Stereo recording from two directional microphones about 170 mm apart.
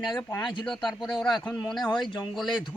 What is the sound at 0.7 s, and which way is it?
Speech, 5° left (ahead or behind).